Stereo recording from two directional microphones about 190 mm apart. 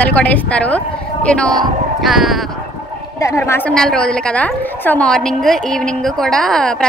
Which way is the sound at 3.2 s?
15° left (ahead or behind).